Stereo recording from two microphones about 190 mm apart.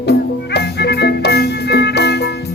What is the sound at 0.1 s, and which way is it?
Music, 60° left (ahead or behind).